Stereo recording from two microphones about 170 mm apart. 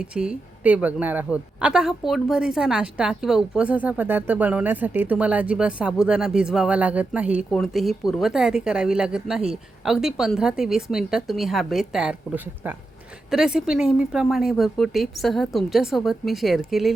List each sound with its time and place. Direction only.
0.0 s a woman's voice: 5° right (ahead or behind)